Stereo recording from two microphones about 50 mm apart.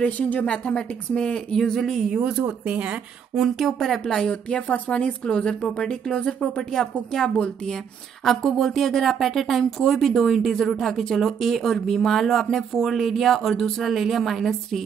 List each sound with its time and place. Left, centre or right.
0.0 s speech: left; by 2.0 s centre
2.4 s speech: right
3.3 s speech: centre
4.3 s speech: left
7.7 s speech: centre